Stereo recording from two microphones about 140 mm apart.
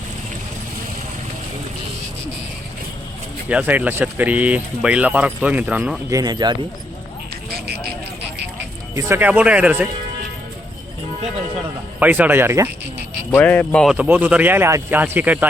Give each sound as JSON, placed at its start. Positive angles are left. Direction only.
{"t": 3.5, "sound": "speech", "side_deg": -10}
{"t": 6.1, "sound": "speech", "side_deg": -25}
{"t": 9.0, "sound": "speech", "side_deg": -15}
{"t": 11.9, "sound": "speech", "side_deg": -10}
{"t": 13.3, "sound": "speech", "side_deg": 15}
{"t": 13.8, "sound": "speech", "side_deg": -10}